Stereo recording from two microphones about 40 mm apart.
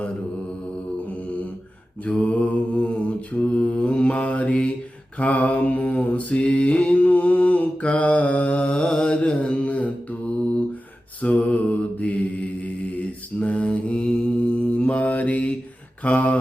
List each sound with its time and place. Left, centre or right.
1.1 s a sound: left
2.0 s mantra: left
11.2 s mantra: left